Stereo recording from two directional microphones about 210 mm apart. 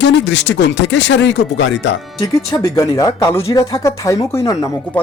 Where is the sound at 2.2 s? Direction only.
15° left (ahead or behind).